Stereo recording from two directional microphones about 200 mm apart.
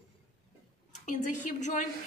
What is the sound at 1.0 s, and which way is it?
Speech, 40° left (ahead or behind).